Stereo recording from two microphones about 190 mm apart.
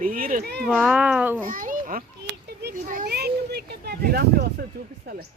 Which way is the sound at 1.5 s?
45° right (ahead or behind).